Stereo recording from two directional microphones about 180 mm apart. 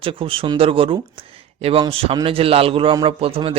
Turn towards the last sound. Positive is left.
turn(degrees=-30)  # may be behind; listen again after turning